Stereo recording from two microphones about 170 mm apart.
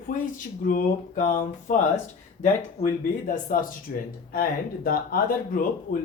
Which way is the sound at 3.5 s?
55° left (ahead or behind).